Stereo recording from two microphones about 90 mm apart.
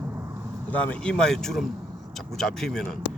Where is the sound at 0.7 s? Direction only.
15° left (ahead or behind).